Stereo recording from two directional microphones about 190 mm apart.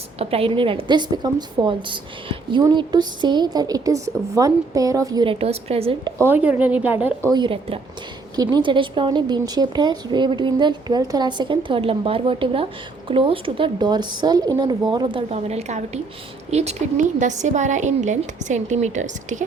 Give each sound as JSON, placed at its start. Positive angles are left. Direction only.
{"t": 0.2, "sound": "a woman's voice", "side_deg": -30}
{"t": 6.1, "sound": "a woman's voice", "side_deg": -10}